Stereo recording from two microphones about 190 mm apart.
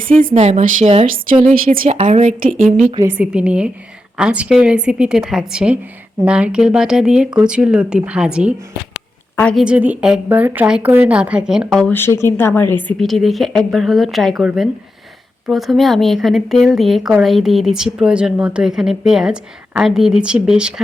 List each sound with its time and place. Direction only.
0.2 s speech: 40° right (ahead or behind)
2.9 s a woman's voice: 15° right (ahead or behind)
9.3 s a woman's voice: 5° left (ahead or behind)
9.6 s speech: 5° right (ahead or behind)